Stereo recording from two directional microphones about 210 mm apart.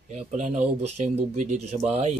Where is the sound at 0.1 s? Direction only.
35° right (ahead or behind).